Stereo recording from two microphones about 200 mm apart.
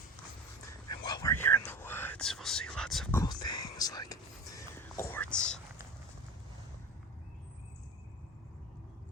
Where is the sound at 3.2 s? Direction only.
20° left (ahead or behind); by 5.5 s 5° left (ahead or behind).